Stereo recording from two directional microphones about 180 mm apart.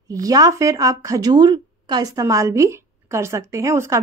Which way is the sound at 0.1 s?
20° right (ahead or behind).